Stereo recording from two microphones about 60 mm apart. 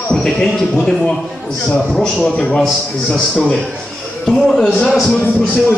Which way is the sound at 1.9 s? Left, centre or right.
Centre.